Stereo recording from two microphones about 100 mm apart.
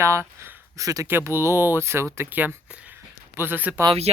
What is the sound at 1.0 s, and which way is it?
Speech, 20° right (ahead or behind).